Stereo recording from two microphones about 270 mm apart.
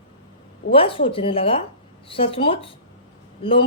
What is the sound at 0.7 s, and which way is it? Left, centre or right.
A woman's voice, centre.